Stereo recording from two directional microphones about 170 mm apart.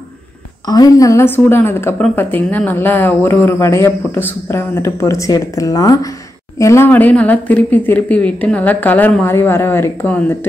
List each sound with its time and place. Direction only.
0.7 s speech: 20° left (ahead or behind)